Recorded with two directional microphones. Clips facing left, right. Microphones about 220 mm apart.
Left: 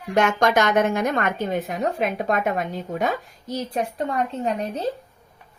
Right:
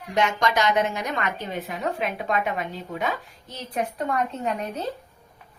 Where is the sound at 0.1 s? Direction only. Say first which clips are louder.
Left 4 dB; 50° left (ahead or behind); by 4.8 s 30° left (ahead or behind).